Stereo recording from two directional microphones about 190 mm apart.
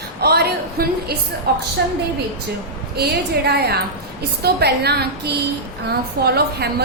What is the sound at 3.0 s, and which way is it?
A woman's voice, 55° right (ahead or behind).